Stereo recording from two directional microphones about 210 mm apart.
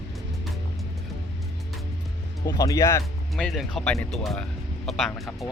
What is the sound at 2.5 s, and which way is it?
Speech, 15° left (ahead or behind).